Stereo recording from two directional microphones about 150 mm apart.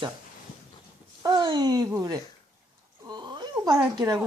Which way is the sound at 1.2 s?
30° right (ahead or behind).